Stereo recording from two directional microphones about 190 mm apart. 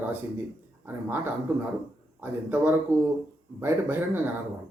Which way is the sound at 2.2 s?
10° right (ahead or behind).